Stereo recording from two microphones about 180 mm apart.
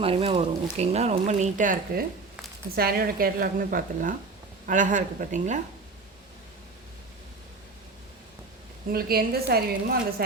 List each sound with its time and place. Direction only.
0.0 s speech: 30° right (ahead or behind); by 2.0 s 50° right (ahead or behind)
2.7 s a woman's voice: 60° right (ahead or behind)
8.9 s a woman's voice: 55° right (ahead or behind)